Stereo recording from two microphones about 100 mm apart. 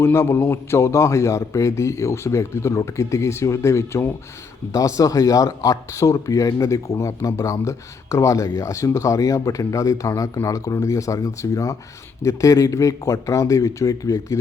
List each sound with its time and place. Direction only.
0.0 s a man's voice: 25° left (ahead or behind)